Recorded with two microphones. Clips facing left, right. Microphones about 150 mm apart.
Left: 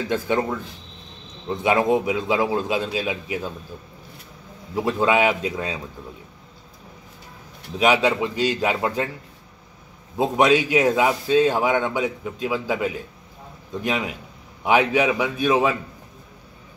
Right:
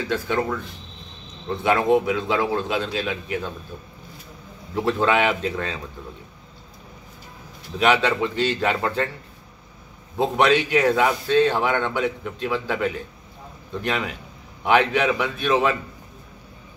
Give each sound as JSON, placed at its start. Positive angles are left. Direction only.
{"t": 0.1, "sound": "a man's voice", "side_deg": 20}
{"t": 4.7, "sound": "a man's voice", "side_deg": 10}
{"t": 7.8, "sound": "a man's voice", "side_deg": 10}
{"t": 10.1, "sound": "a man's voice", "side_deg": 10}